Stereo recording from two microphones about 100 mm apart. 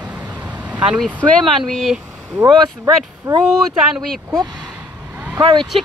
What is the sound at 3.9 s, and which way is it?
Speech, centre (ahead or behind).